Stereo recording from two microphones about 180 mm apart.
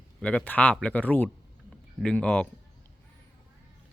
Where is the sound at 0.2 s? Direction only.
5° left (ahead or behind).